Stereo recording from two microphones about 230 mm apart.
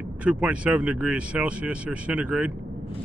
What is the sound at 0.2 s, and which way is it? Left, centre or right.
Speech, centre.